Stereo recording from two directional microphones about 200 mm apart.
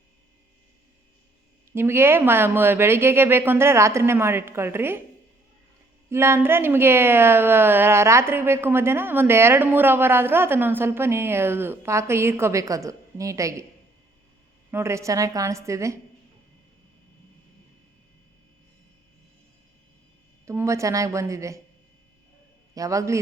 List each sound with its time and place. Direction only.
1.7 s a woman's voice: 10° right (ahead or behind)
6.1 s a woman's voice: 10° right (ahead or behind)
14.7 s a woman's voice: 15° right (ahead or behind)
20.4 s a woman's voice: 15° right (ahead or behind)
22.7 s a woman's voice: 15° right (ahead or behind)